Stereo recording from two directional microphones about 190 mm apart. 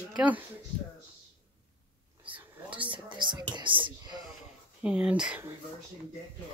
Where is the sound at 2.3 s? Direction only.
10° right (ahead or behind).